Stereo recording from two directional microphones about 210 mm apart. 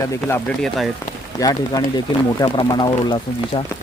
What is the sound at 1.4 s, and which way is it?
Speech, 15° left (ahead or behind).